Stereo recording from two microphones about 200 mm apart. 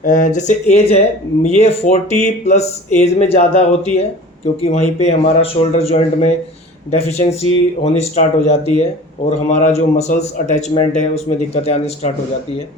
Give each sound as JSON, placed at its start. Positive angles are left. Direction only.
{"t": 0.0, "sound": "speech", "side_deg": 40}